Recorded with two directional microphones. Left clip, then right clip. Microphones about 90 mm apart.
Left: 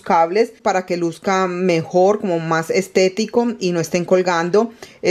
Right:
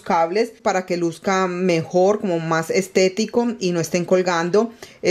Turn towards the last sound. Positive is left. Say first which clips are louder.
# left 2 dB
turn(degrees=20)  # may be behind; listen again after turning